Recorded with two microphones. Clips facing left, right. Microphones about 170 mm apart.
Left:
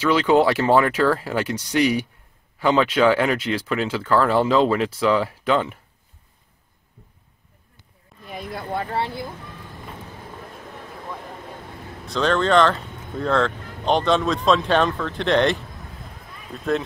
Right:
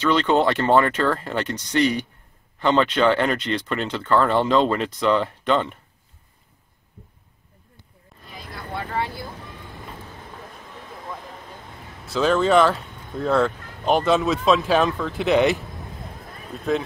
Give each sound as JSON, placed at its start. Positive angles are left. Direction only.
{"t": 0.0, "sound": "speech", "side_deg": 5}
{"t": 8.3, "sound": "vehicle", "side_deg": 55}
{"t": 8.9, "sound": "vehicle", "side_deg": 25}
{"t": 12.1, "sound": "speech", "side_deg": -5}